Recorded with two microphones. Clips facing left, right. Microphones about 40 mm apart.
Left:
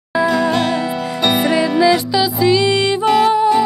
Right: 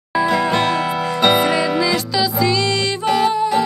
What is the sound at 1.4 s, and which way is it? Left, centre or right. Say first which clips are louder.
Music: left 1 dB; centre.